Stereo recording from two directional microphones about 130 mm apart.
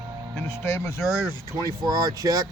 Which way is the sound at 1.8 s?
30° right (ahead or behind).